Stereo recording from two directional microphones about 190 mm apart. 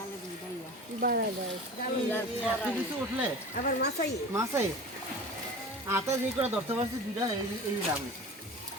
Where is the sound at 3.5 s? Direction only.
55° left (ahead or behind).